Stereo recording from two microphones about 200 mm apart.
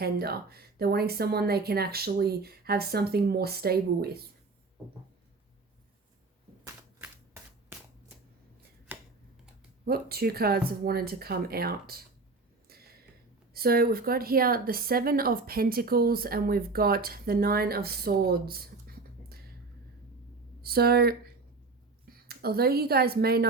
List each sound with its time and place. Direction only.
0.0 s speech: 50° right (ahead or behind)
8.9 s a sound: 10° right (ahead or behind)
9.8 s speech: 50° right (ahead or behind)
13.5 s speech: 50° right (ahead or behind)
20.6 s speech: 50° right (ahead or behind)